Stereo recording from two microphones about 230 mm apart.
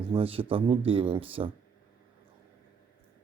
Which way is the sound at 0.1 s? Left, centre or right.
Right.